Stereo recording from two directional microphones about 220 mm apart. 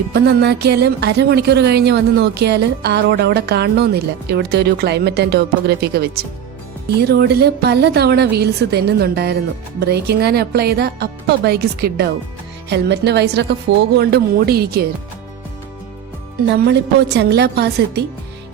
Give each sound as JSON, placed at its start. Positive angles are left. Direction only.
{"t": 0.1, "sound": "speech", "side_deg": -50}
{"t": 16.6, "sound": "speech", "side_deg": -50}